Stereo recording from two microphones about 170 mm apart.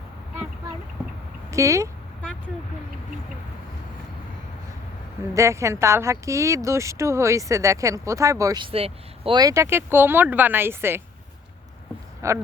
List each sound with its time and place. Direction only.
1.5 s speech: 20° right (ahead or behind)
5.3 s speech: 15° right (ahead or behind); by 9.4 s 35° right (ahead or behind)
9.4 s speech: 20° right (ahead or behind)
12.2 s speech: 15° right (ahead or behind)